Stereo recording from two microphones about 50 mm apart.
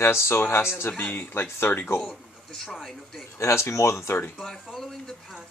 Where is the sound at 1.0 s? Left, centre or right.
Left.